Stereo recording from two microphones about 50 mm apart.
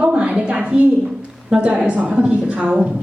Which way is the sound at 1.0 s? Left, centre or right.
Centre.